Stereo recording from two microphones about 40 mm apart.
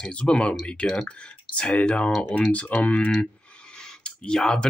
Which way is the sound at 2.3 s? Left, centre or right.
Left.